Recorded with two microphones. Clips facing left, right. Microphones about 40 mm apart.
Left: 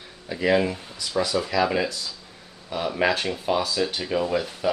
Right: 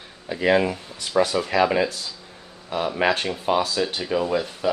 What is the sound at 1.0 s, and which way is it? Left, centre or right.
Speech, right.